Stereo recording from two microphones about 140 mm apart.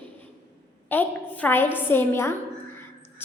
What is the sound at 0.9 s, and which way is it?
A woman's voice, 15° left (ahead or behind).